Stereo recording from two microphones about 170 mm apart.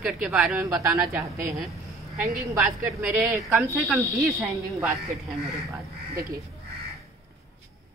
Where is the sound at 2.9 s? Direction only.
5° right (ahead or behind).